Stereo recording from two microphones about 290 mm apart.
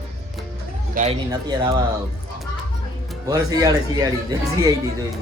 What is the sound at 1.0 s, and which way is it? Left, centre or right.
Speech, right.